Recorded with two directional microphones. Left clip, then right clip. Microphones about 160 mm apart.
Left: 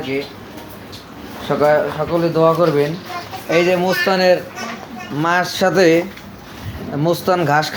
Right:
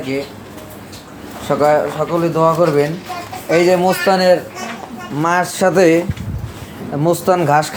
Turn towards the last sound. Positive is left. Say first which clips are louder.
# right 2 dB
turn(degrees=-15)  # may be behind; listen again after turning